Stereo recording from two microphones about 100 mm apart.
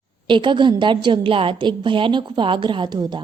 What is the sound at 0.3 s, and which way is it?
A woman's voice, 55° right (ahead or behind).